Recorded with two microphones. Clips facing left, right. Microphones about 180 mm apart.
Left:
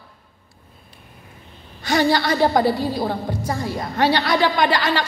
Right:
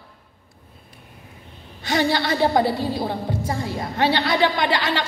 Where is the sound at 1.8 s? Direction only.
20° right (ahead or behind).